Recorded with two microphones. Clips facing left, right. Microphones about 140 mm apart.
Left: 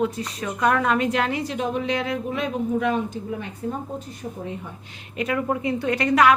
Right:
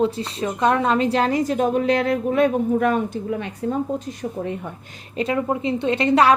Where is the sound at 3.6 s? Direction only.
70° right (ahead or behind).